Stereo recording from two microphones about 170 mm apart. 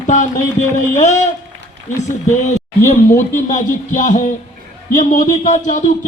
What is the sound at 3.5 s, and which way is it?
Music, 50° left (ahead or behind).